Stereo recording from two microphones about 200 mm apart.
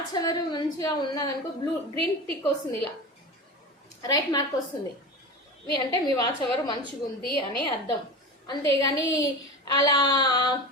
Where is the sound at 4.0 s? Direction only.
20° left (ahead or behind).